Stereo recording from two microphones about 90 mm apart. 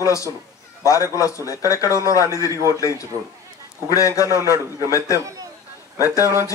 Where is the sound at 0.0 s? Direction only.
35° left (ahead or behind).